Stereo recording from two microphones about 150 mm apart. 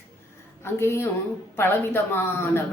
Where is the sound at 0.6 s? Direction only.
15° left (ahead or behind).